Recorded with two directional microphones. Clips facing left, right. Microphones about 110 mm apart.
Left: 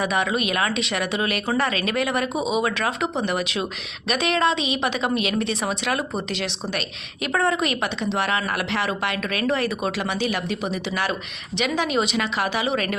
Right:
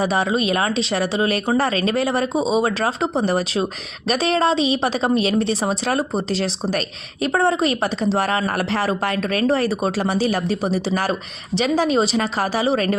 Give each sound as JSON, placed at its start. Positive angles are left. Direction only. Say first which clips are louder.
{"t": 0.0, "sound": "a woman's voice", "louder": "right 3 dB", "side_deg": -30}